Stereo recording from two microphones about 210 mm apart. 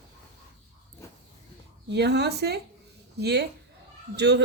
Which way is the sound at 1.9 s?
50° right (ahead or behind).